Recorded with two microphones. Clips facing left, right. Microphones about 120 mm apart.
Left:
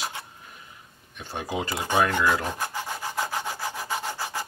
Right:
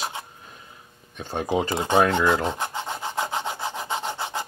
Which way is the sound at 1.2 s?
20° right (ahead or behind).